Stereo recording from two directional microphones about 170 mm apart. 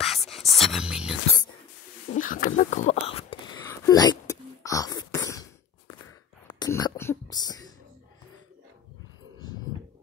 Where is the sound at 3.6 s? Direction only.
15° left (ahead or behind).